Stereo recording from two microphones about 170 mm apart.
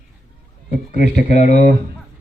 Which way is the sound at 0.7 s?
45° left (ahead or behind).